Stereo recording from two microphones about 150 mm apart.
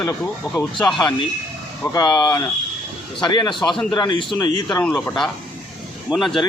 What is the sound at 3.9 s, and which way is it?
Speech, 30° left (ahead or behind).